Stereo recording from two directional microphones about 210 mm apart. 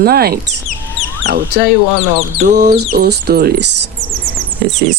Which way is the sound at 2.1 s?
35° right (ahead or behind).